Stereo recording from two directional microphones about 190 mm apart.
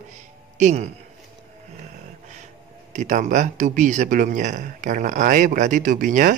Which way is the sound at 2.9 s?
40° right (ahead or behind).